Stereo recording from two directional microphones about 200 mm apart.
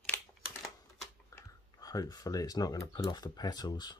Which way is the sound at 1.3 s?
15° left (ahead or behind).